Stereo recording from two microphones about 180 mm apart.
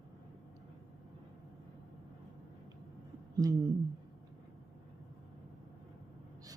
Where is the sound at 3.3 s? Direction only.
20° right (ahead or behind).